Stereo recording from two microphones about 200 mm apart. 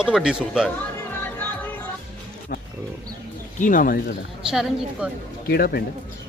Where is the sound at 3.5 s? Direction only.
40° left (ahead or behind).